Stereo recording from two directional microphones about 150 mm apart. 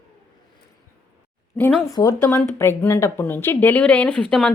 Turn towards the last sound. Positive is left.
turn(degrees=5)  # may be behind; listen again after turning